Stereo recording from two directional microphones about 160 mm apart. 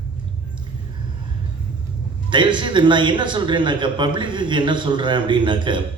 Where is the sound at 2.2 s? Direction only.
30° right (ahead or behind).